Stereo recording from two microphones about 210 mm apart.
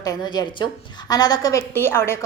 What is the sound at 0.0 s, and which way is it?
A woman's voice, 20° left (ahead or behind).